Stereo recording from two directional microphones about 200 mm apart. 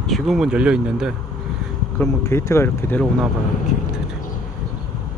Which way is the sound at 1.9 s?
15° left (ahead or behind).